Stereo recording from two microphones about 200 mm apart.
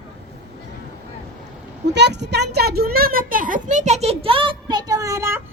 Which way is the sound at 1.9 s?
60° right (ahead or behind).